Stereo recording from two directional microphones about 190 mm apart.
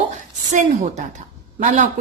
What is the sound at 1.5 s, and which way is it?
Speech, 40° right (ahead or behind).